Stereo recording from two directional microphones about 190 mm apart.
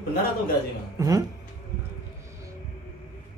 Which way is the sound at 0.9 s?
20° right (ahead or behind).